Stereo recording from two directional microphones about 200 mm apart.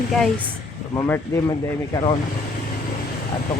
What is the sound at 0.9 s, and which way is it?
Speech, 10° left (ahead or behind).